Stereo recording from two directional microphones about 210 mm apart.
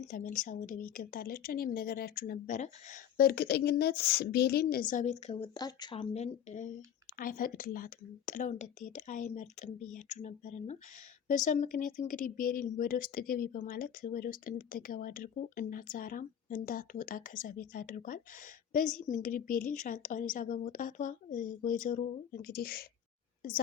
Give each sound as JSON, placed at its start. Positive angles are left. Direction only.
{"t": 0.0, "sound": "speech", "side_deg": 40}